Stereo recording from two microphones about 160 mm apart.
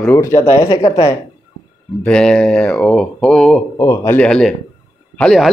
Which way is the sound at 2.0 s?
5° left (ahead or behind).